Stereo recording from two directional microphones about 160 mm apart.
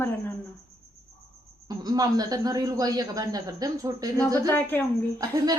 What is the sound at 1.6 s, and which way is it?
A woman's voice, 25° right (ahead or behind).